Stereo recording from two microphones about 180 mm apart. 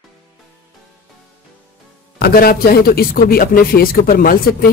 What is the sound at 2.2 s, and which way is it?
Speech, 55° left (ahead or behind).